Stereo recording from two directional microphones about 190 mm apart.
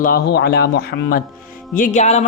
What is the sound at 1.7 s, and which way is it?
Music, 40° left (ahead or behind).